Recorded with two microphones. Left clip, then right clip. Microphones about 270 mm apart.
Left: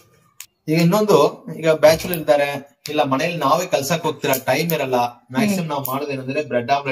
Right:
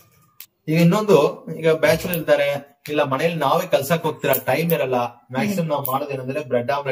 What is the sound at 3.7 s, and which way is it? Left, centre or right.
Speech, centre.